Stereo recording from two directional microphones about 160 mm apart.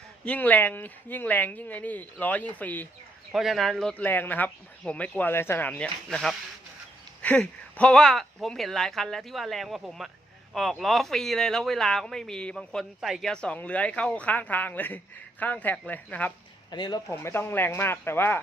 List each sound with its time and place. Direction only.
0.3 s speech: 10° left (ahead or behind)
3.3 s speech: centre (ahead or behind)
16.7 s speech: 25° left (ahead or behind)
17.2 s speech: 15° left (ahead or behind)